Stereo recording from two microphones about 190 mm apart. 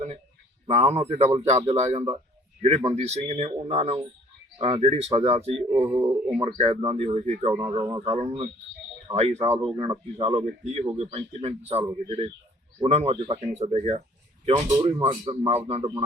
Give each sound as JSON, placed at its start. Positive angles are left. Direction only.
{"t": 0.7, "sound": "speech", "side_deg": -35}
{"t": 5.7, "sound": "speech", "side_deg": -10}
{"t": 6.6, "sound": "speech", "side_deg": -30}
{"t": 12.8, "sound": "speech", "side_deg": -35}